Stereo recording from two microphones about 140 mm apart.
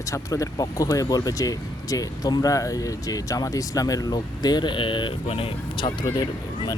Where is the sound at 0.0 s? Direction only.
25° left (ahead or behind).